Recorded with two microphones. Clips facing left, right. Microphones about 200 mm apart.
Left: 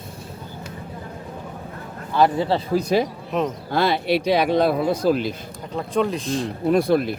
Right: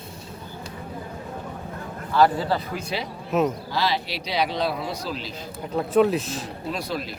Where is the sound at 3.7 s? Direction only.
55° left (ahead or behind).